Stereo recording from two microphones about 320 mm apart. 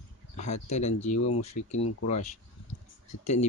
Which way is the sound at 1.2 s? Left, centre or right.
Left.